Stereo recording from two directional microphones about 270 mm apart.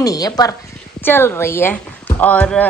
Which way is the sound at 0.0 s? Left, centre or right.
Centre.